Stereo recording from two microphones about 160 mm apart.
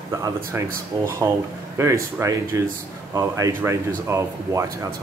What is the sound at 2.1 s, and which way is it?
Speech, 20° right (ahead or behind).